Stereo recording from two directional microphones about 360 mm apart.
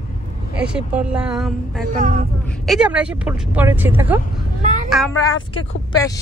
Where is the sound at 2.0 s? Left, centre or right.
Right.